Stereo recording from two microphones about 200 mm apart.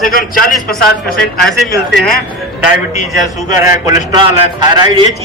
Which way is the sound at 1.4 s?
Centre (ahead or behind).